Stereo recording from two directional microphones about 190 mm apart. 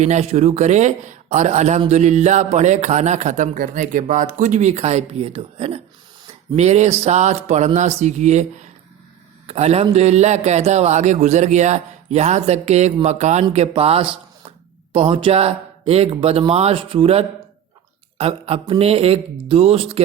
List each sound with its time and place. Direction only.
0.0 s speech: 35° right (ahead or behind)
9.5 s speech: 35° right (ahead or behind)